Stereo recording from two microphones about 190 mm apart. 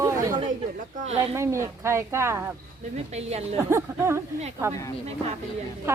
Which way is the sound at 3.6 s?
15° right (ahead or behind).